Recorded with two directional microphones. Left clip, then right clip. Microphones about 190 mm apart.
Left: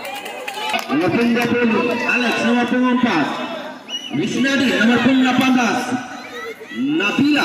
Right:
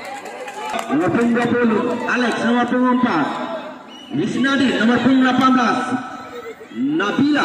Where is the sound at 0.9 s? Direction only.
10° left (ahead or behind).